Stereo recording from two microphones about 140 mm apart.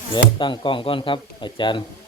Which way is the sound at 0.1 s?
35° left (ahead or behind).